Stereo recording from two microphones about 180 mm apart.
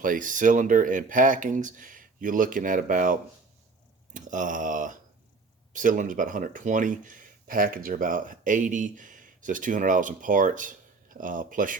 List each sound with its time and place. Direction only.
0.0 s speech: 50° right (ahead or behind)